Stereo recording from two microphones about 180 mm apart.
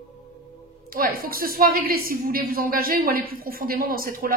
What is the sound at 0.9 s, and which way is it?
A woman's voice, 55° right (ahead or behind).